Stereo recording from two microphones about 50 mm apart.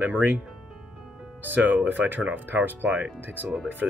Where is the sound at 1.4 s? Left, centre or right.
Right.